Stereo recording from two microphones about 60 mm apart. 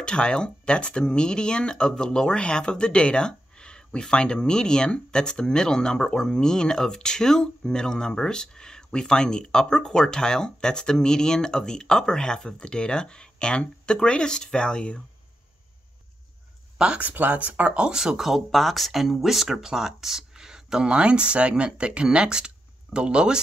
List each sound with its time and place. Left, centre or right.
0.0 s speech: centre
16.7 s speech: centre
17.1 s speech: right